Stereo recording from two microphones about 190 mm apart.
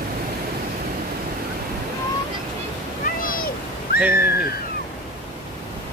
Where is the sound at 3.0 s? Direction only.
50° left (ahead or behind).